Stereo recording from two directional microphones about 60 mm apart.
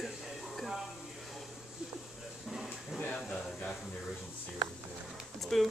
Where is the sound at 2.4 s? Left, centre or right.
Centre.